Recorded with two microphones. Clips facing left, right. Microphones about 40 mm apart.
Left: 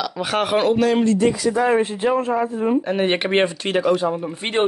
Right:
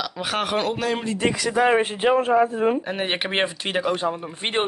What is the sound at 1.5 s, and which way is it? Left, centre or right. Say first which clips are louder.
Speech: left 1 dB; right.